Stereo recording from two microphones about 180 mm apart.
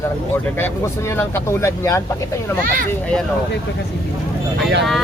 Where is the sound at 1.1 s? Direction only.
15° left (ahead or behind).